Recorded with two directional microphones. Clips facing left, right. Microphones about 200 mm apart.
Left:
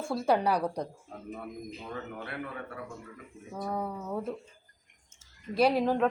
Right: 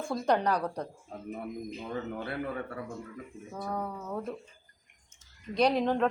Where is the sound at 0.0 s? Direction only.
5° left (ahead or behind).